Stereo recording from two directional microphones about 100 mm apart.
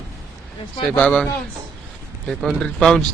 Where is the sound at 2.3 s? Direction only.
Centre (ahead or behind).